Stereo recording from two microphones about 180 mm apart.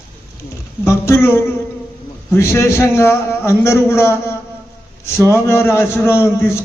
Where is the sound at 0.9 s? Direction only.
15° left (ahead or behind).